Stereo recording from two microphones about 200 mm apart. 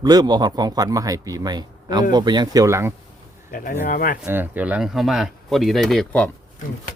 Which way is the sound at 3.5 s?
45° left (ahead or behind).